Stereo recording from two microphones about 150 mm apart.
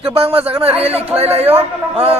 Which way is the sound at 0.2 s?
40° right (ahead or behind).